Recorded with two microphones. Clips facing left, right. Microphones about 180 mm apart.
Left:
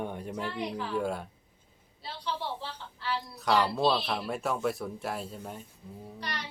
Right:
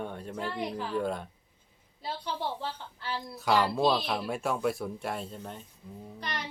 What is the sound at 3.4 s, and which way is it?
Speech, centre (ahead or behind).